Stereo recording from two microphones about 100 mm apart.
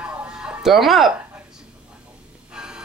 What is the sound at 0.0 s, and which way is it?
Music, 10° right (ahead or behind).